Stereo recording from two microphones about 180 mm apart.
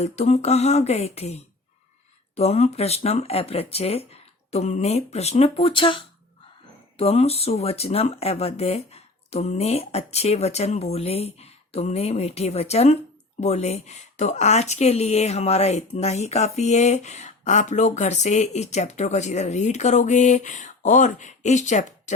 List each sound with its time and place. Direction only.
0.0 s a woman's voice: 40° left (ahead or behind)